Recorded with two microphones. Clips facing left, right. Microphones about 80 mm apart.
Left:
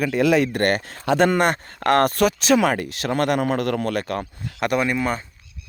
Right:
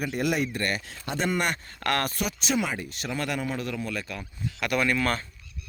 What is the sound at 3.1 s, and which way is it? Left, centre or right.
A man's voice, left.